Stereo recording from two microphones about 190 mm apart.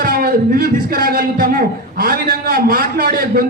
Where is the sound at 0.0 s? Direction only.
50° right (ahead or behind).